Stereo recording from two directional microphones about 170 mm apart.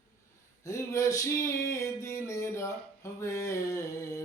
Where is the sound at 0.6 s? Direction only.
20° left (ahead or behind).